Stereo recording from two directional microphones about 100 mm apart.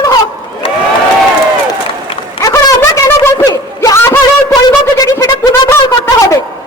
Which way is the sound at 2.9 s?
25° left (ahead or behind).